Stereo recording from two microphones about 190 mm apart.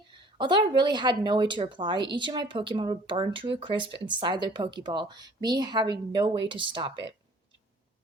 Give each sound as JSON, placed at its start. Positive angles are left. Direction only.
{"t": 0.3, "sound": "speech", "side_deg": -25}